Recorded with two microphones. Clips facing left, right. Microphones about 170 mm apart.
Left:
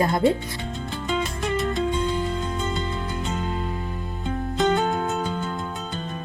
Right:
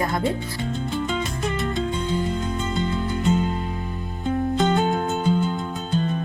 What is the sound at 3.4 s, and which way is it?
Music, 20° right (ahead or behind).